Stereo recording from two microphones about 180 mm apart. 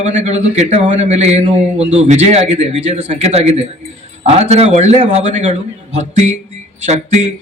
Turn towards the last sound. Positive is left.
turn(degrees=-40)  # may be behind; listen again after turning